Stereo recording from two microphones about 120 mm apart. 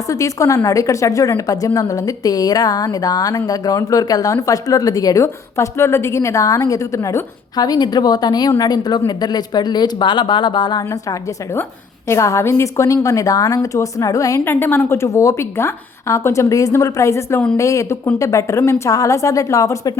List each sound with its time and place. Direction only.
0.1 s a woman's voice: 25° left (ahead or behind)
12.0 s a woman's voice: 25° left (ahead or behind)